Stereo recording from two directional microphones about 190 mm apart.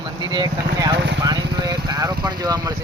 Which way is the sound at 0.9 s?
65° right (ahead or behind).